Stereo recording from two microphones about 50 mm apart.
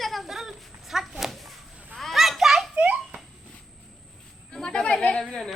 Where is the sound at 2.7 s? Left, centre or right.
Right.